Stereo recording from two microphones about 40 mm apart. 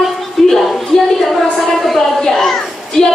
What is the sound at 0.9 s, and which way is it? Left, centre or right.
Speech, left.